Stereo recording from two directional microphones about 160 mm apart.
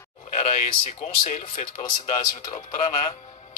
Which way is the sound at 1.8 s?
30° left (ahead or behind).